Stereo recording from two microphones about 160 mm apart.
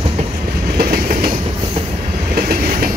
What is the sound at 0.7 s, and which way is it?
Train, 70° right (ahead or behind).